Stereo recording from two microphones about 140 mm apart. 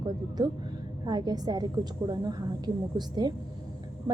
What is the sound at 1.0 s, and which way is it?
A woman's voice, 30° right (ahead or behind).